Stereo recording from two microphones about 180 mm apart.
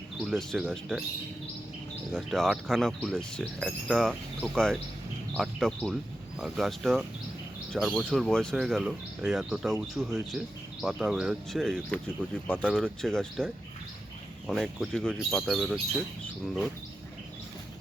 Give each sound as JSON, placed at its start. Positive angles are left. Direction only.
{"t": 0.2, "sound": "speech", "side_deg": 0}
{"t": 2.1, "sound": "speech", "side_deg": 0}